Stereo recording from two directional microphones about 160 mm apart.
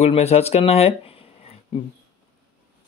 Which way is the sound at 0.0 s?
40° left (ahead or behind).